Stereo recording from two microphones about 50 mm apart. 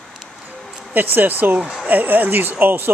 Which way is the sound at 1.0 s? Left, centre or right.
Right.